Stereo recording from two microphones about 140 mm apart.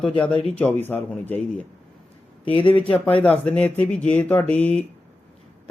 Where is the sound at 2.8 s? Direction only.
10° left (ahead or behind).